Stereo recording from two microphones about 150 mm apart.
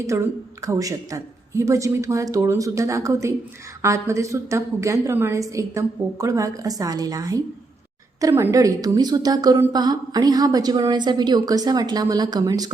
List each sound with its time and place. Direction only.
0.1 s a woman's voice: 15° right (ahead or behind)